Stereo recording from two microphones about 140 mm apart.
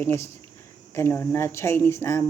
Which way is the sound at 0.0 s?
15° left (ahead or behind).